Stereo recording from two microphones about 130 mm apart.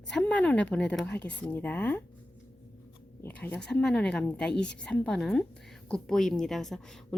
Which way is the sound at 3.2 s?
15° left (ahead or behind).